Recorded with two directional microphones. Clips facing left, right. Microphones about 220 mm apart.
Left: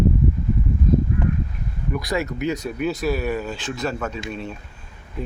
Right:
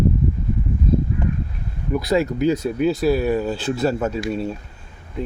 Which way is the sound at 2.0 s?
25° right (ahead or behind).